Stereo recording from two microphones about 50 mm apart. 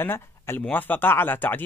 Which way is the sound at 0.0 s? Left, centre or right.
Left.